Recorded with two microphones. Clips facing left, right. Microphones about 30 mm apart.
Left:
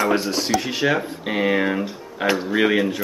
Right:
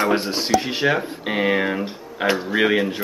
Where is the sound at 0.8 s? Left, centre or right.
Centre.